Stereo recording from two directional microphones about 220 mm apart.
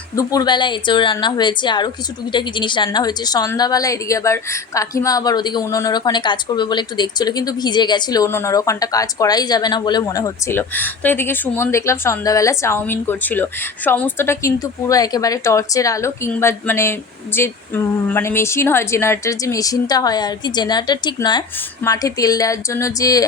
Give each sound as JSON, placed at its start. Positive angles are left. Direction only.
{"t": 0.2, "sound": "a woman's voice", "side_deg": 15}